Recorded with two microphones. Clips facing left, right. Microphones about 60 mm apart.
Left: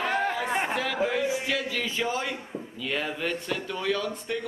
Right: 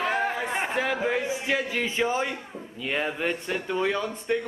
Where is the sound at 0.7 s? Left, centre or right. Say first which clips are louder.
Right 1 dB; right.